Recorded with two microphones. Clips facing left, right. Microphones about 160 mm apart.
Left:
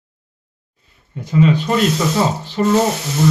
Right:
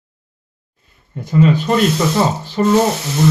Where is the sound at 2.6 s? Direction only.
35° right (ahead or behind).